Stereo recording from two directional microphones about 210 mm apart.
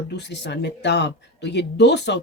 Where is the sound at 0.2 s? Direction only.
55° left (ahead or behind).